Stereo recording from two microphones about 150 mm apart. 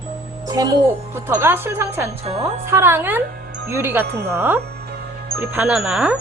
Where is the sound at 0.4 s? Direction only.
25° right (ahead or behind); by 6.1 s 5° right (ahead or behind).